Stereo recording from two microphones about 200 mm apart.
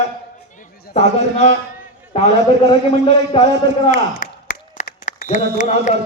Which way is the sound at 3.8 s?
45° left (ahead or behind).